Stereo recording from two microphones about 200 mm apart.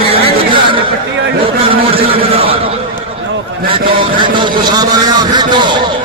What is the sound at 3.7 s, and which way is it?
A man's voice, 25° right (ahead or behind).